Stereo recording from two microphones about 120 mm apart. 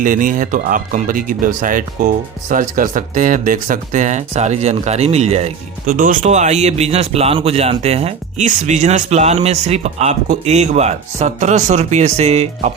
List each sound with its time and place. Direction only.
0.0 s speech: 90° right; by 12.7 s 60° right (ahead or behind)